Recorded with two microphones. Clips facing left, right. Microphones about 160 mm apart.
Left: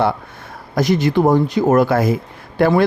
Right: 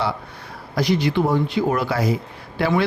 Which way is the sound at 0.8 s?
45° left (ahead or behind).